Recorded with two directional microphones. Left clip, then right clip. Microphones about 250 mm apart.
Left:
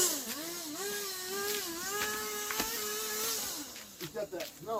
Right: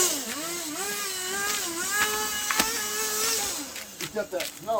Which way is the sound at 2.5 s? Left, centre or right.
Right.